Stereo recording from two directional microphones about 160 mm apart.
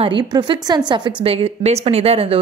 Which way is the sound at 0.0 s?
30° right (ahead or behind).